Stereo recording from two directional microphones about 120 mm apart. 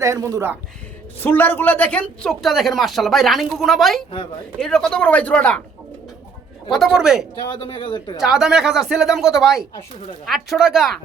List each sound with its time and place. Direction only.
0.0 s speech: 25° right (ahead or behind)
1.2 s speech: 15° left (ahead or behind)
6.7 s speech: centre (ahead or behind)
7.6 s speech: 45° left (ahead or behind)
8.2 s speech: 5° right (ahead or behind)